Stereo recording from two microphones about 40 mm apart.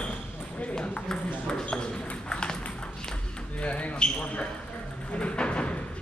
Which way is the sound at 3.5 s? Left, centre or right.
Left.